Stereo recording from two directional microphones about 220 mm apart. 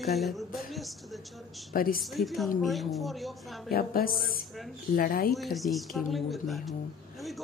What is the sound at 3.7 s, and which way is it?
Speech, 40° left (ahead or behind).